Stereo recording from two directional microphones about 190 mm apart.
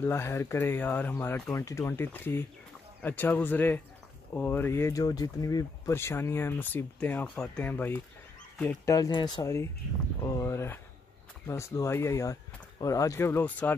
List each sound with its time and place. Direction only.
0.0 s speech: 15° left (ahead or behind)